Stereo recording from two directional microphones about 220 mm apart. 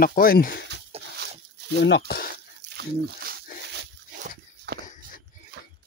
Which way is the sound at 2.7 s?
45° right (ahead or behind).